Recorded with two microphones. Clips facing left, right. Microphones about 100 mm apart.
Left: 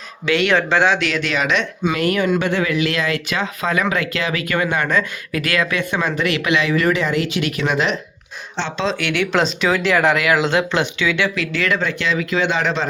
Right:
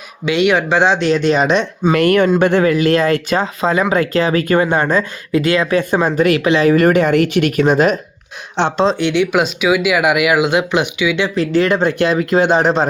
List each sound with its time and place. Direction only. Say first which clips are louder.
0.3 s speech: right 3 dB; 15° right (ahead or behind)
0.9 s speech: right 7 dB; 35° right (ahead or behind)
1.9 s speech: right 7 dB; 55° right (ahead or behind)
8.6 s speech: right 9 dB; 60° right (ahead or behind)
9.0 s speech: right 4 dB; 20° right (ahead or behind)
11.3 s speech: right 7 dB; 35° right (ahead or behind)
11.9 s speech: right 6 dB; 50° right (ahead or behind)